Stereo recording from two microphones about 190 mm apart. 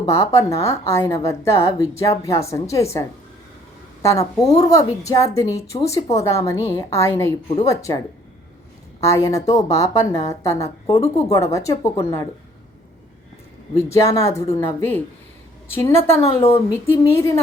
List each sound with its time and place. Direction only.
0.0 s a woman's voice: 15° left (ahead or behind)
4.0 s a woman's voice: 15° left (ahead or behind)
13.7 s a woman's voice: 15° left (ahead or behind)